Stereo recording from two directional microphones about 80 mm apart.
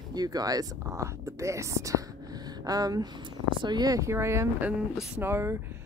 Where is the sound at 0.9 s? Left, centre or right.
Right.